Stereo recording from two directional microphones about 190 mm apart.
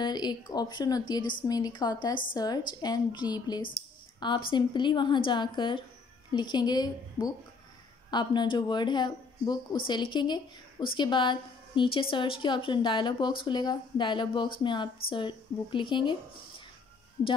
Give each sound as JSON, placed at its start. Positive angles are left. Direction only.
{"t": 0.0, "sound": "speech", "side_deg": 20}